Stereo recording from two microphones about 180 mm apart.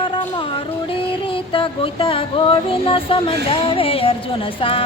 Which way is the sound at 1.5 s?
30° left (ahead or behind).